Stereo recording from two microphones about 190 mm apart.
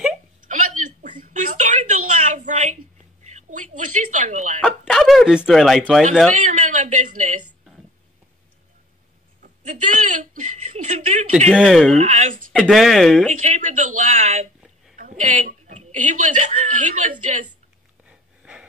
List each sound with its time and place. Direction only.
0.5 s a sound: 45° right (ahead or behind)
3.3 s speech: 40° right (ahead or behind)
4.6 s speech: centre (ahead or behind)
6.4 s a sound: 40° right (ahead or behind)
9.4 s chuckle: 40° right (ahead or behind)
11.5 s speech: centre (ahead or behind)
12.0 s speech: 35° right (ahead or behind)
12.5 s speech: centre (ahead or behind)
13.3 s speech: 40° right (ahead or behind)
18.0 s sniff: 5° right (ahead or behind)